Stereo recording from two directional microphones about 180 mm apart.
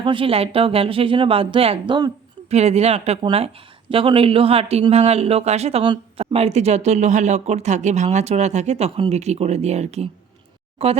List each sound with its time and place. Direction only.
0.0 s speech: 30° right (ahead or behind)
2.5 s speech: 35° right (ahead or behind)